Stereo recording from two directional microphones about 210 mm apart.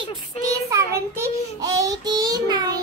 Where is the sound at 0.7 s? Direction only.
15° right (ahead or behind).